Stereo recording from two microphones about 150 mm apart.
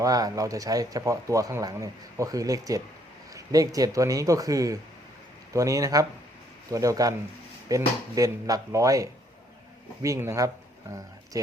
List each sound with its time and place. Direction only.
0.0 s speech: 25° right (ahead or behind)